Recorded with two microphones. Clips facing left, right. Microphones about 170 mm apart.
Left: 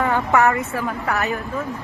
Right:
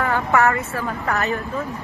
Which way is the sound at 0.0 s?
20° left (ahead or behind).